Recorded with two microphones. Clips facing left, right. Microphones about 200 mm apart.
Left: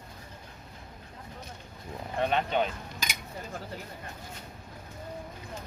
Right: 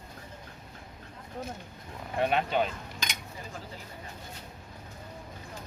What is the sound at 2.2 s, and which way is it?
Speech, 5° right (ahead or behind).